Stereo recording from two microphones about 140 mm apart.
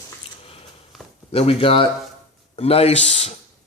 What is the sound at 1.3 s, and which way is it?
Speech, 45° left (ahead or behind).